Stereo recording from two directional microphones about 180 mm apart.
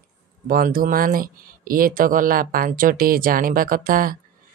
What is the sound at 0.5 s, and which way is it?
Speech, 50° right (ahead or behind).